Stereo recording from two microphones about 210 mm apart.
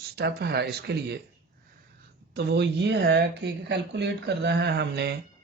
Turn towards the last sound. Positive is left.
turn(degrees=-55)  # may be behind; listen again after turning